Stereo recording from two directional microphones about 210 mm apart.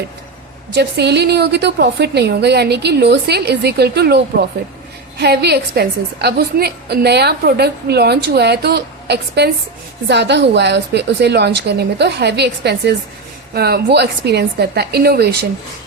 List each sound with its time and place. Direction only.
0.7 s a woman's voice: 50° right (ahead or behind)